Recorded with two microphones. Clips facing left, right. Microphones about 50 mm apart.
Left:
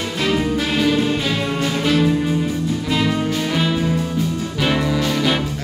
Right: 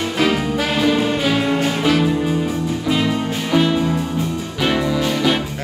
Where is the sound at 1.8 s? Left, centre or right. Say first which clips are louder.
Left 2 dB; centre.